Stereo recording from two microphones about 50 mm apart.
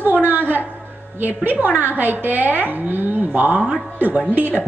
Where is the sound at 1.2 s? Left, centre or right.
Right.